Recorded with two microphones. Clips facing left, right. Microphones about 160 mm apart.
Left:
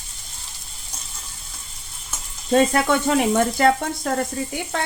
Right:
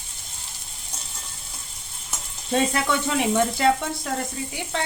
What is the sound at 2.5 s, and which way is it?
Sizzle, 50° left (ahead or behind).